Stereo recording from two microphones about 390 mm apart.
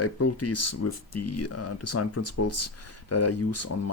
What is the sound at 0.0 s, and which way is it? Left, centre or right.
Speech, left.